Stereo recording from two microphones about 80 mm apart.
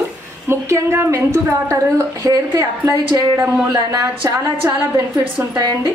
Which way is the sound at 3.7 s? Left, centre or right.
Right.